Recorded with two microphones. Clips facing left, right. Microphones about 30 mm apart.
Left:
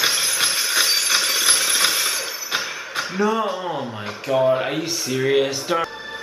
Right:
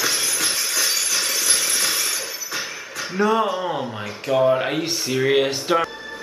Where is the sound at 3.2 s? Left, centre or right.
Centre.